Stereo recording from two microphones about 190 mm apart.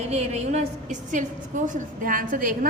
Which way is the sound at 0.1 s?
35° right (ahead or behind).